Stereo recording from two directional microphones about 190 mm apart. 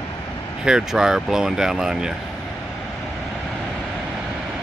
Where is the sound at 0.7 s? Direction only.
5° right (ahead or behind).